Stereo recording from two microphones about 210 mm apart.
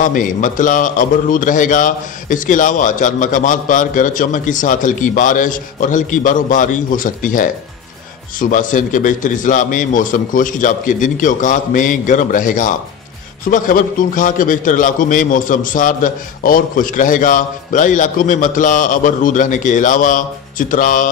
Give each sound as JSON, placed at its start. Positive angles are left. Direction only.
{"t": 0.0, "sound": "a man's voice", "side_deg": 40}